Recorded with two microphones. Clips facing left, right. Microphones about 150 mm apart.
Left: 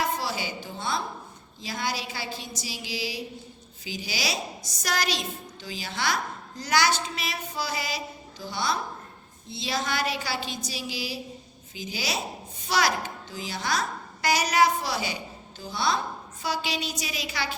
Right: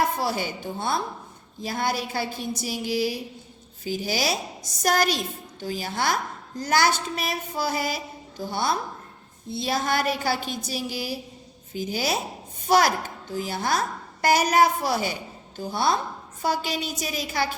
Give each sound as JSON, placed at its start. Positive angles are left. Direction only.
{"t": 0.0, "sound": "a woman's voice", "side_deg": -55}